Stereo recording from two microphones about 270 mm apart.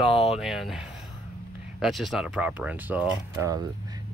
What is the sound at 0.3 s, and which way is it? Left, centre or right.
Speech, centre.